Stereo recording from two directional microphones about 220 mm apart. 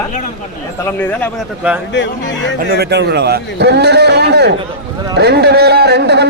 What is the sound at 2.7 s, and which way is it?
A man's voice, 50° right (ahead or behind).